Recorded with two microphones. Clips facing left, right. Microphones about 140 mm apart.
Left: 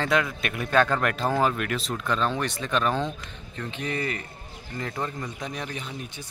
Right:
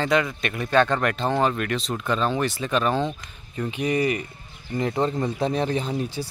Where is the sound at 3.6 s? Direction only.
10° right (ahead or behind).